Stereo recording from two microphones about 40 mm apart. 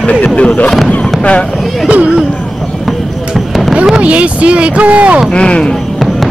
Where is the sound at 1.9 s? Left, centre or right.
Right.